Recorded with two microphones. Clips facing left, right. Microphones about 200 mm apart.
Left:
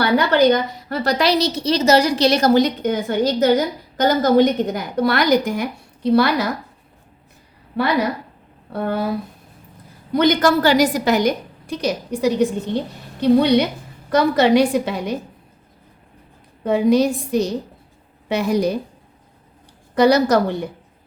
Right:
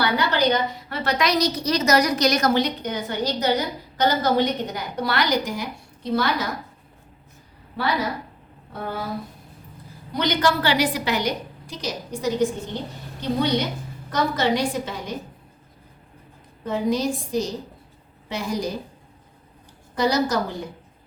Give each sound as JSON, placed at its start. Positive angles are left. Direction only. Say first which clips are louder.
{"t": 0.3, "sound": "a woman's voice", "louder": "left 6 dB", "side_deg": 45}
{"t": 2.6, "sound": "a woman's voice", "louder": "left 7 dB", "side_deg": 50}
{"t": 8.7, "sound": "speech", "louder": "left 8 dB", "side_deg": 65}
{"t": 10.2, "sound": "a woman's voice", "louder": "left 7 dB", "side_deg": 50}
{"t": 16.6, "sound": "a woman's voice", "louder": "left 7 dB", "side_deg": 65}
{"t": 20.0, "sound": "a woman's voice", "louder": "left 7 dB", "side_deg": 65}